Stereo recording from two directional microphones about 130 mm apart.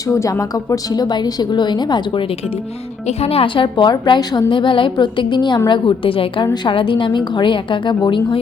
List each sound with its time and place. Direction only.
0.1 s a woman's voice: 25° left (ahead or behind)
3.1 s a woman's voice: 50° left (ahead or behind)